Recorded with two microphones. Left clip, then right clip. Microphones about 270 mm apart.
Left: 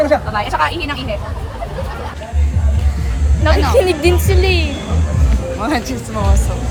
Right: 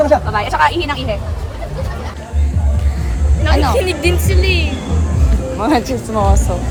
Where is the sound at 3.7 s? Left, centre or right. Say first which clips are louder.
Left 3 dB; centre.